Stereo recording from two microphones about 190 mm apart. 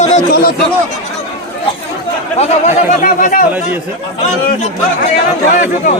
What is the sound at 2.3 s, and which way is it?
Speech, 35° left (ahead or behind).